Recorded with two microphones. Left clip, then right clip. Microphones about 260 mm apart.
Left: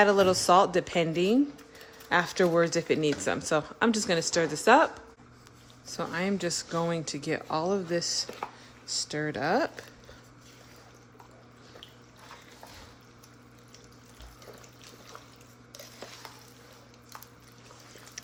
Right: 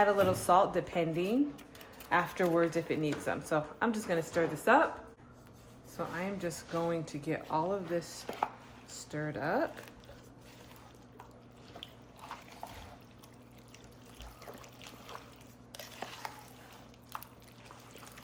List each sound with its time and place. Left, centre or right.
0.0 s speech: left
6.0 s speech: left